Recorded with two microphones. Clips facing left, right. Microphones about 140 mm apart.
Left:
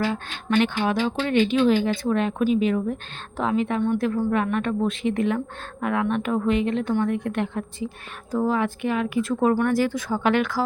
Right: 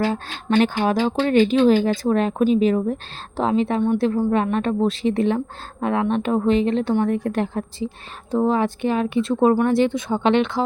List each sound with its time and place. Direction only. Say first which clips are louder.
0.5 s speech: right 3 dB; 40° right (ahead or behind); by 10.6 s 25° right (ahead or behind)